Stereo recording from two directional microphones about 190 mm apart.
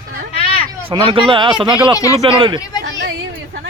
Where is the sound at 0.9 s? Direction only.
25° right (ahead or behind).